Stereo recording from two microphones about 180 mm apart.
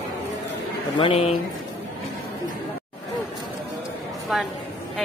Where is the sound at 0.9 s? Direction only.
30° left (ahead or behind).